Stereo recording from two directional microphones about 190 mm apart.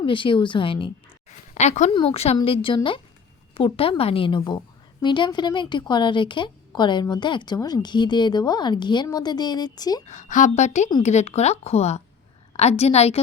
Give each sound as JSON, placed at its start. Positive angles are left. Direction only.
{"t": 0.0, "sound": "speech", "side_deg": 25}
{"t": 1.5, "sound": "speech", "side_deg": 40}
{"t": 10.1, "sound": "speech", "side_deg": 40}